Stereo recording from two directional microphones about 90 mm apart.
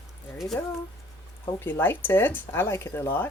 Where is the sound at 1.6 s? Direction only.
25° left (ahead or behind).